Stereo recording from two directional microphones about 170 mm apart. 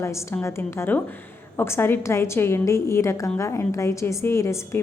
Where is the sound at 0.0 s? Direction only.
15° left (ahead or behind).